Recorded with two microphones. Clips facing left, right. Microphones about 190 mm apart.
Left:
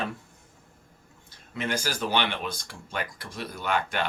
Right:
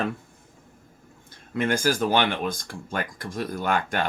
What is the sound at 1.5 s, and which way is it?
Speech, 50° right (ahead or behind).